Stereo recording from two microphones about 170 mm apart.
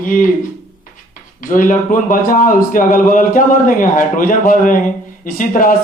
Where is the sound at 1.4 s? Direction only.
50° left (ahead or behind).